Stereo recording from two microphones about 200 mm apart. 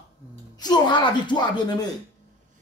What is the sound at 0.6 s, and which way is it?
Speech, 20° left (ahead or behind).